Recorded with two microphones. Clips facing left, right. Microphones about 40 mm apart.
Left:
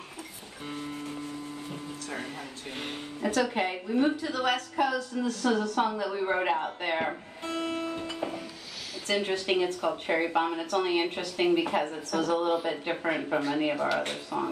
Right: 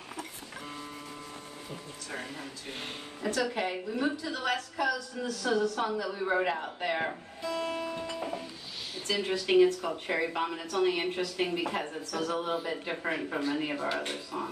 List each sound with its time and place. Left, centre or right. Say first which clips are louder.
3.3 s a woman's voice: left 3 dB; left
7.4 s music: left 1 dB; left
9.0 s a woman's voice: left 2 dB; left
9.8 s speech: left 3 dB; left
10.7 s a woman's voice: left 2 dB; left
11.8 s a woman's voice: left 5 dB; left
12.6 s a woman's voice: left 4 dB; left
13.9 s a woman's voice: left 4 dB; left